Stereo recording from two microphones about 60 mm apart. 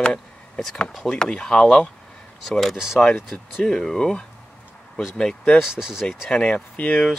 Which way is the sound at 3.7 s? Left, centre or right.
Centre.